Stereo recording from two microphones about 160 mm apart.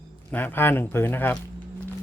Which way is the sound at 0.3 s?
10° left (ahead or behind).